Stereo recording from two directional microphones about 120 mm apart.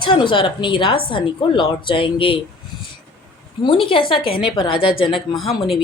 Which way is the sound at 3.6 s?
45° left (ahead or behind).